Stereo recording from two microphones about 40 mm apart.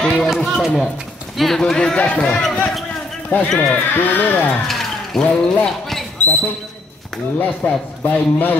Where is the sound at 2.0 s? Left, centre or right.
Left.